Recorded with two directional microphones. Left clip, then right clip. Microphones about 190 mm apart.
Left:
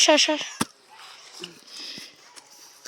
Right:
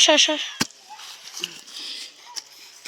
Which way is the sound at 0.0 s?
10° left (ahead or behind).